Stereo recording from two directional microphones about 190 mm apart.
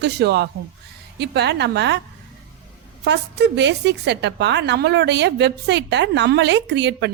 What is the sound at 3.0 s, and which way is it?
A woman's voice, 65° right (ahead or behind).